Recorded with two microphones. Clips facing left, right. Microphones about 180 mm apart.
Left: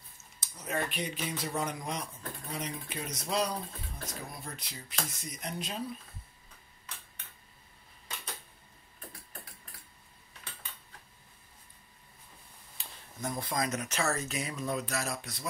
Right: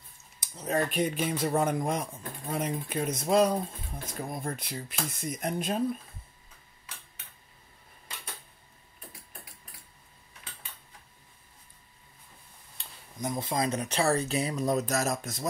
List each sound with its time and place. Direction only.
0.6 s speech: 40° right (ahead or behind)
12.8 s a sound: centre (ahead or behind)
13.2 s speech: 20° right (ahead or behind); by 15.4 s 45° right (ahead or behind)